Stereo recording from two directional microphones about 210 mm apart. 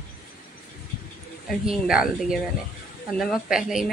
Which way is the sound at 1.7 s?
5° right (ahead or behind).